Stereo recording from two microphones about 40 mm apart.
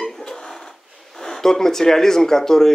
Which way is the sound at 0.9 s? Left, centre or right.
Centre.